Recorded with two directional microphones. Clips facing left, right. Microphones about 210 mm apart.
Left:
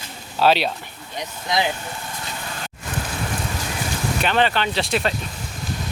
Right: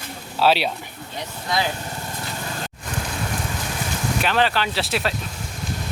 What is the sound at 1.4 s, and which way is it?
Speech, 20° left (ahead or behind).